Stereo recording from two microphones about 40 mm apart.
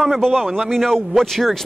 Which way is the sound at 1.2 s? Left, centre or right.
Centre.